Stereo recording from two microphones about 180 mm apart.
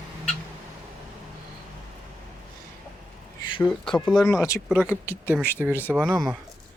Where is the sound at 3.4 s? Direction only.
25° left (ahead or behind).